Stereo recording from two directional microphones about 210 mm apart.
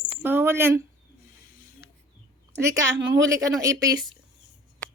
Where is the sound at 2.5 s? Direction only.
15° right (ahead or behind).